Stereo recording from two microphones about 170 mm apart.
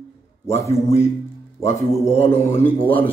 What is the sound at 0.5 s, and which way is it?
Speech, 15° left (ahead or behind).